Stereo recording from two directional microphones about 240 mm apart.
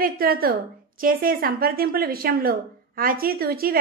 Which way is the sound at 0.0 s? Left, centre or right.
Right.